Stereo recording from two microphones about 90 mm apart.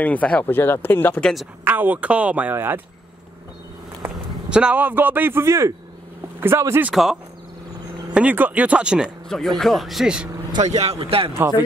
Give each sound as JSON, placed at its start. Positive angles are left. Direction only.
{"t": 0.0, "sound": "speech", "side_deg": 15}
{"t": 1.2, "sound": "a man's voice", "side_deg": 0}
{"t": 1.6, "sound": "a man's voice", "side_deg": -20}
{"t": 4.5, "sound": "a man's voice", "side_deg": -10}
{"t": 6.9, "sound": "a man's voice", "side_deg": -5}
{"t": 8.1, "sound": "speech", "side_deg": -15}
{"t": 9.3, "sound": "a man's voice", "side_deg": 5}
{"t": 10.5, "sound": "a man's voice", "side_deg": -90}
{"t": 11.3, "sound": "a man's voice", "side_deg": -30}